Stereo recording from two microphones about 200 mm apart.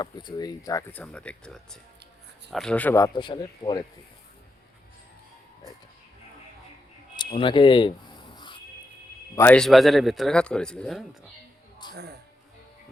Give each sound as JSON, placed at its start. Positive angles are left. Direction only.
{"t": 0.0, "sound": "speech", "side_deg": 20}
{"t": 7.3, "sound": "music", "side_deg": 25}
{"t": 9.3, "sound": "a man's voice", "side_deg": 10}
{"t": 11.8, "sound": "speech", "side_deg": 20}